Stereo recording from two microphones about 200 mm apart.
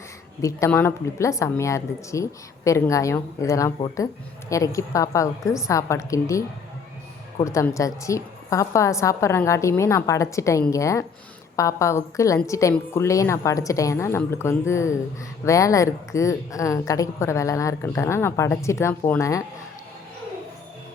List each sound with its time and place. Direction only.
0.4 s a woman's voice: 10° left (ahead or behind)